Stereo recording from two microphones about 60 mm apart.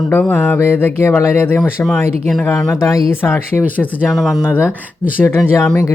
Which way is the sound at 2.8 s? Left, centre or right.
Left.